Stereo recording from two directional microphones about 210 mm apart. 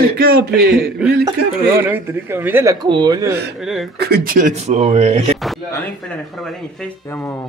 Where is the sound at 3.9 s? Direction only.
50° right (ahead or behind); by 5.3 s 30° right (ahead or behind).